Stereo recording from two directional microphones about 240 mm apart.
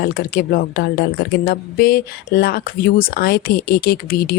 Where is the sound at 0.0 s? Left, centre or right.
Left.